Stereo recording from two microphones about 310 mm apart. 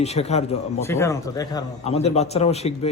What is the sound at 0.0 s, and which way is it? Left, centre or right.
Speech, centre.